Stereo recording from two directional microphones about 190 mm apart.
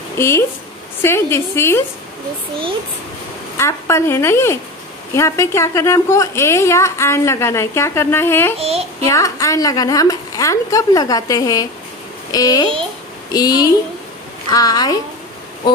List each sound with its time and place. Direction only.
0.2 s a woman's voice: 15° left (ahead or behind)
3.5 s a woman's voice: 15° left (ahead or behind)
8.5 s a child's voice: 30° right (ahead or behind)
9.0 s a woman's voice: 15° left (ahead or behind)